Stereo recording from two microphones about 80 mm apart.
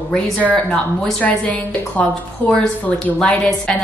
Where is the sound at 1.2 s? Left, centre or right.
Centre.